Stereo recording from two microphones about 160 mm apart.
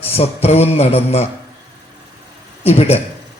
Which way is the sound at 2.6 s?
40° left (ahead or behind).